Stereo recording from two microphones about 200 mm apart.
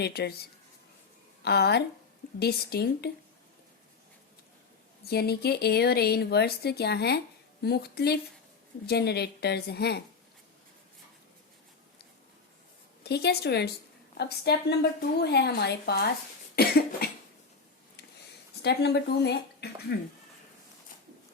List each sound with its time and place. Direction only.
0.0 s speech: 55° left (ahead or behind)
1.4 s a woman's voice: 55° left (ahead or behind)
5.0 s a woman's voice: 50° left (ahead or behind)
13.0 s a woman's voice: 55° left (ahead or behind)
18.6 s a woman's voice: 55° left (ahead or behind)